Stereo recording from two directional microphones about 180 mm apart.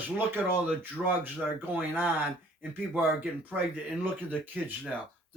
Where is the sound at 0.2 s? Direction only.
10° right (ahead or behind).